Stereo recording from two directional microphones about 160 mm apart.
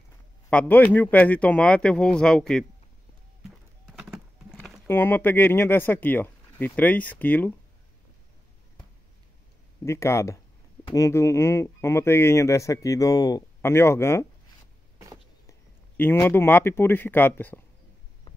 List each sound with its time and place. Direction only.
0.5 s speech: 10° left (ahead or behind)
3.4 s clip-clop: 5° right (ahead or behind)
4.8 s speech: 15° left (ahead or behind)
9.8 s speech: 15° left (ahead or behind)
16.0 s speech: 15° left (ahead or behind)